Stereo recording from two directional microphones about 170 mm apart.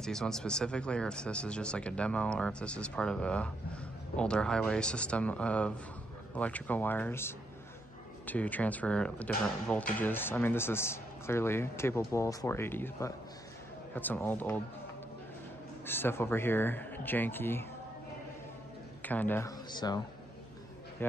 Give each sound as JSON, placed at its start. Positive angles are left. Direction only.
{"t": 0.0, "sound": "speech", "side_deg": 5}
{"t": 15.8, "sound": "speech", "side_deg": 10}
{"t": 19.0, "sound": "speech", "side_deg": 10}
{"t": 19.7, "sound": "speech", "side_deg": 25}
{"t": 21.0, "sound": "speech", "side_deg": 10}